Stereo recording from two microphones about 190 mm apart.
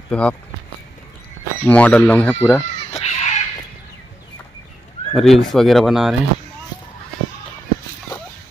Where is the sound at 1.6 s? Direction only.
5° left (ahead or behind).